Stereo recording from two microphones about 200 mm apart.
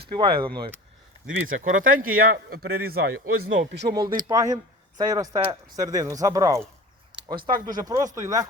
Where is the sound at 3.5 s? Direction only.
65° right (ahead or behind).